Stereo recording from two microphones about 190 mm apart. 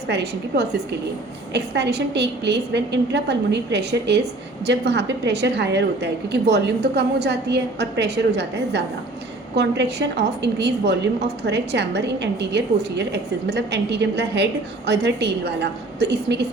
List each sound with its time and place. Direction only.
0.1 s a woman's voice: 60° right (ahead or behind)